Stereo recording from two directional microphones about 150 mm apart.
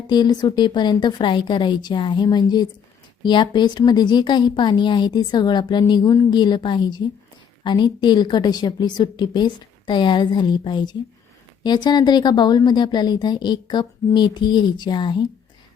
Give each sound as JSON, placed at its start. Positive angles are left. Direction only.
{"t": 0.1, "sound": "a woman's voice", "side_deg": 30}